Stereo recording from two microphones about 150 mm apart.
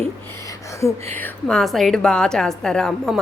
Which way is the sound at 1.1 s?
10° left (ahead or behind).